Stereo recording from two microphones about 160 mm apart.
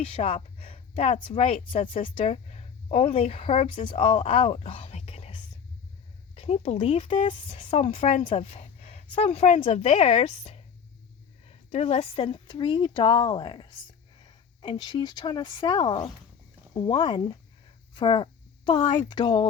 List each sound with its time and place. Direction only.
0.0 s a woman's voice: 35° left (ahead or behind)
17.9 s a sound: 30° left (ahead or behind)
19.0 s a woman's voice: 30° left (ahead or behind)